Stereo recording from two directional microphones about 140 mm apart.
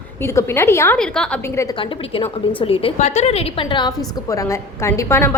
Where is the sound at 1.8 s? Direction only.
40° left (ahead or behind).